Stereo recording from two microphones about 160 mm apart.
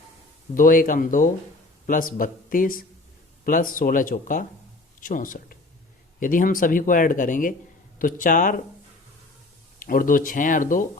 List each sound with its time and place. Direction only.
0.5 s speech: 60° left (ahead or behind)
9.8 s speech: 60° left (ahead or behind)